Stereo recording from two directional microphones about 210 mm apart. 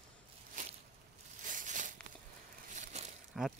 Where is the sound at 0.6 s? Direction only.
40° right (ahead or behind).